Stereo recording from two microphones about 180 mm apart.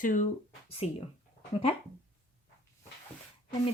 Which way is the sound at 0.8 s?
35° left (ahead or behind).